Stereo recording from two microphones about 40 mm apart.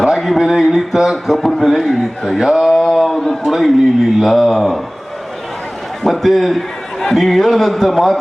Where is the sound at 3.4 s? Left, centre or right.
Centre.